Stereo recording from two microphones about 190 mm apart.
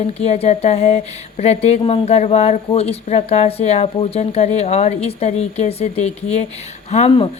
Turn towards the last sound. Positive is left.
turn(degrees=30)  # may be behind; listen again after turning